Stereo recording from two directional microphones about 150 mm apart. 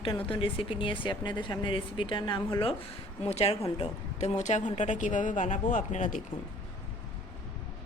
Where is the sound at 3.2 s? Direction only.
40° left (ahead or behind).